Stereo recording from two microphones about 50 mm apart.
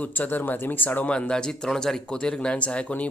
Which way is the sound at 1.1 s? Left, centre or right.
Centre.